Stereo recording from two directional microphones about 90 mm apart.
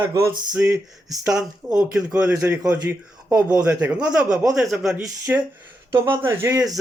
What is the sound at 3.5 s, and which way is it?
Speech, 15° right (ahead or behind).